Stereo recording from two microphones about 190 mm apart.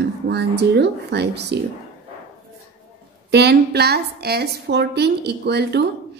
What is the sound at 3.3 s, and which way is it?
A woman's voice, 60° right (ahead or behind).